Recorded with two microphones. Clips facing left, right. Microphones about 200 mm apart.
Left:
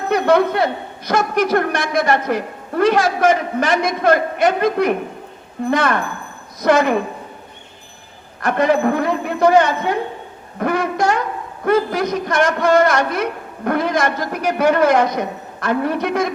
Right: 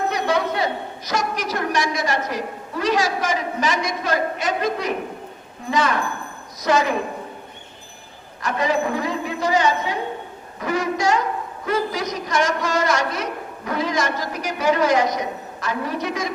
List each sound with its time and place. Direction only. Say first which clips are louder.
0.1 s a man's voice: left 7 dB; 55° left (ahead or behind)
8.4 s a man's voice: left 6 dB; 55° left (ahead or behind)